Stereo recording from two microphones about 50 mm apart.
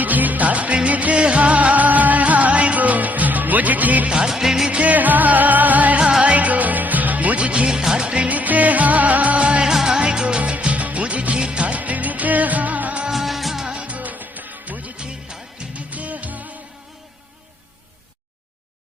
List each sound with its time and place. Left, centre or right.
0.0 s music: right
4.3 s music: centre
4.7 s music: right
6.0 s music: centre
9.6 s music: centre
13.1 s music of bollywood: centre
13.7 s music: right
14.9 s music: centre